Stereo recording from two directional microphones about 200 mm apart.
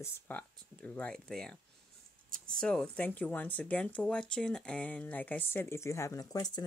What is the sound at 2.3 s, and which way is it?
Speech, 45° right (ahead or behind).